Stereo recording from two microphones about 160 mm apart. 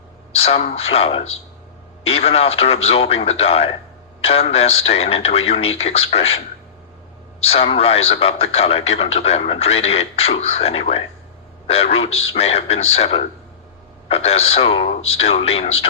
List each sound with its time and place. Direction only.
0.3 s speech: 40° left (ahead or behind)
7.4 s speech: 35° left (ahead or behind)